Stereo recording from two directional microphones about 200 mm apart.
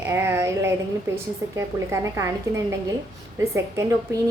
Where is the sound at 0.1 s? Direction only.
15° right (ahead or behind).